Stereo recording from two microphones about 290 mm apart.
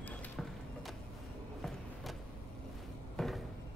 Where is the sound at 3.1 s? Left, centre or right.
Centre.